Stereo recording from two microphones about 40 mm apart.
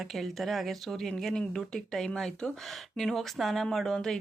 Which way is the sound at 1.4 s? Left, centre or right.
Centre.